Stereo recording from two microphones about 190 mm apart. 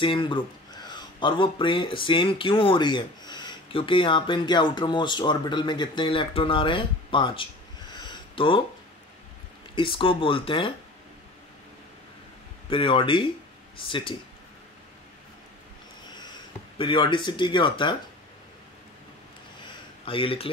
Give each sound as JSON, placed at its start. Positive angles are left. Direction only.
{"t": 0.0, "sound": "speech", "side_deg": 25}
{"t": 7.9, "sound": "a sound", "side_deg": 25}
{"t": 9.8, "sound": "speech", "side_deg": 25}
{"t": 12.6, "sound": "speech", "side_deg": 25}
{"t": 16.7, "sound": "speech", "side_deg": 25}
{"t": 19.6, "sound": "a sound", "side_deg": 25}